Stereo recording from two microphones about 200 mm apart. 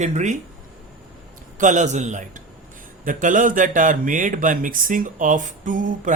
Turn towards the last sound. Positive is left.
turn(degrees=-40)  # may be behind; listen again after turning